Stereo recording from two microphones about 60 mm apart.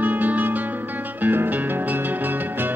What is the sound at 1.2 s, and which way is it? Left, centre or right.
Music, right.